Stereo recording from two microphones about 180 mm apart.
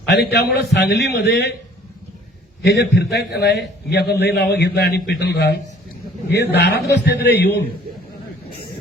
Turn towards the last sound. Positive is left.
turn(degrees=65)  # may be behind; listen again after turning